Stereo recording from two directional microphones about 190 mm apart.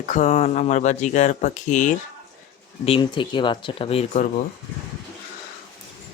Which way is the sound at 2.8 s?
25° left (ahead or behind).